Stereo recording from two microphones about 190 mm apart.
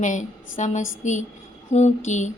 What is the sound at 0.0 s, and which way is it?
A woman's voice, 40° left (ahead or behind).